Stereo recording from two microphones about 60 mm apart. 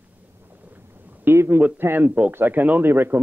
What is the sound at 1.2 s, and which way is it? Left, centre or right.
Speech, right.